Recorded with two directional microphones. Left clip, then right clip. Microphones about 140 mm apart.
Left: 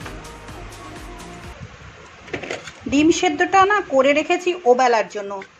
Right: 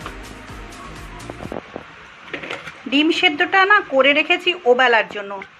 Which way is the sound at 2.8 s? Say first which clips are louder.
Right 1 dB; 20° left (ahead or behind).